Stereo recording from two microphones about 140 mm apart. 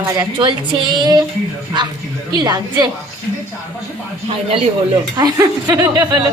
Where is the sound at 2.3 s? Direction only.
30° right (ahead or behind).